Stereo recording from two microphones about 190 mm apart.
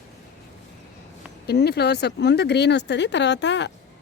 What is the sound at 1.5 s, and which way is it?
Speech, 60° left (ahead or behind).